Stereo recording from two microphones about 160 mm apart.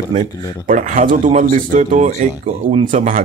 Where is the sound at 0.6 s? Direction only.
55° right (ahead or behind).